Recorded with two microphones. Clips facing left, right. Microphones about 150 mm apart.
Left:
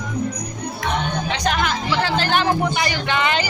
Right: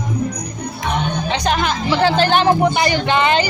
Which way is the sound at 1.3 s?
25° right (ahead or behind).